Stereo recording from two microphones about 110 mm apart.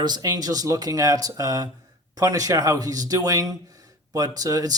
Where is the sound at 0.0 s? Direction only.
40° right (ahead or behind).